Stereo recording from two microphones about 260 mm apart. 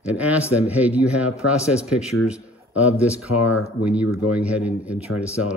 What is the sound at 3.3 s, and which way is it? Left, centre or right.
Speech, left.